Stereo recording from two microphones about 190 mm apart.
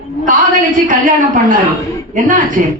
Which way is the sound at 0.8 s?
45° right (ahead or behind).